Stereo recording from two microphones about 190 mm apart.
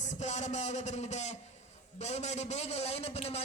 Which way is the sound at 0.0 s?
40° left (ahead or behind).